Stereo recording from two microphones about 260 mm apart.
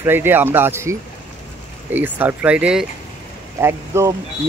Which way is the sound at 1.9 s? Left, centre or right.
Centre.